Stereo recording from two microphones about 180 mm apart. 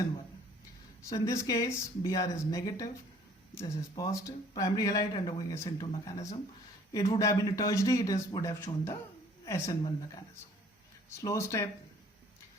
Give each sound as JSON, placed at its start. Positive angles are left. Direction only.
{"t": 1.1, "sound": "speech", "side_deg": 20}
{"t": 6.9, "sound": "a woman's voice", "side_deg": 20}
{"t": 11.2, "sound": "speech", "side_deg": 15}